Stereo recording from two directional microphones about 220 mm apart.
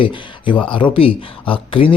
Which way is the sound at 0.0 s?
20° left (ahead or behind).